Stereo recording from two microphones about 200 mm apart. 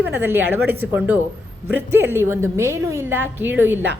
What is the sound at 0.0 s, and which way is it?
A woman's voice, 10° right (ahead or behind).